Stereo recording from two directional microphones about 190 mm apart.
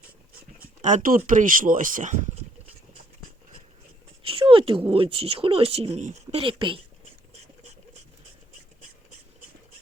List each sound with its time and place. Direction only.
0.8 s speech: 40° right (ahead or behind)
4.2 s a sound: 30° right (ahead or behind)
4.9 s speech: 30° right (ahead or behind)